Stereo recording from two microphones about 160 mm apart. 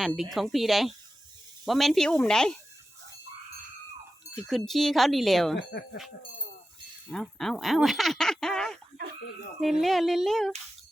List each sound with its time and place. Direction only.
0.0 s speech: centre (ahead or behind)
4.4 s speech: centre (ahead or behind)
5.5 s speech: 90° left
7.1 s speech: centre (ahead or behind)